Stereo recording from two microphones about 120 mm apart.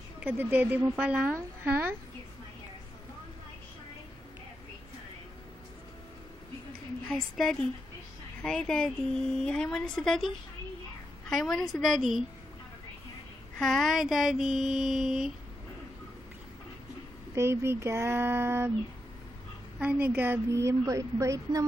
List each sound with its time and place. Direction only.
0.2 s speech: 15° right (ahead or behind)
7.1 s a woman's voice: 5° left (ahead or behind)
13.6 s a woman's voice: centre (ahead or behind)
17.4 s a woman's voice: 20° right (ahead or behind)
19.8 s a woman's voice: 10° right (ahead or behind); by 21.6 s 30° right (ahead or behind)